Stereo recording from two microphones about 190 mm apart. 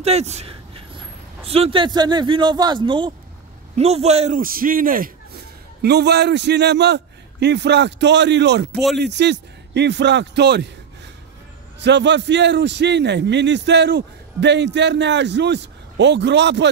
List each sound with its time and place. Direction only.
0.0 s a man's voice: 35° right (ahead or behind)
4.4 s a man's voice: 50° right (ahead or behind)
11.8 s a man's voice: 65° right (ahead or behind)